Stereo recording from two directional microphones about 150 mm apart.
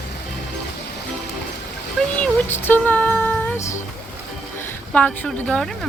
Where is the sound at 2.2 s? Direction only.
10° left (ahead or behind).